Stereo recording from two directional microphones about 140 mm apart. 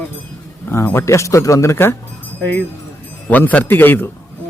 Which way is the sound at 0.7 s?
15° left (ahead or behind).